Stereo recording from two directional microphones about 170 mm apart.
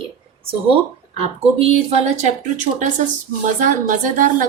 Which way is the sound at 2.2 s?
45° right (ahead or behind).